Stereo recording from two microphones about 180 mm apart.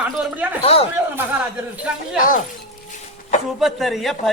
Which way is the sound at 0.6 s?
30° left (ahead or behind).